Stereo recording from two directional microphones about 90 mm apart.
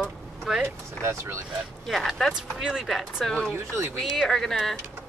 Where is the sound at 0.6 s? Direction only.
30° right (ahead or behind).